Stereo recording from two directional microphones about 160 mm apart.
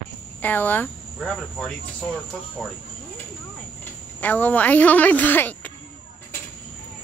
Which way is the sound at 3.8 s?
10° left (ahead or behind).